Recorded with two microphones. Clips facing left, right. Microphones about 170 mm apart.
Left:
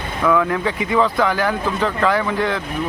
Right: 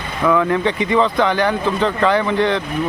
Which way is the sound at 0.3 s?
Centre (ahead or behind).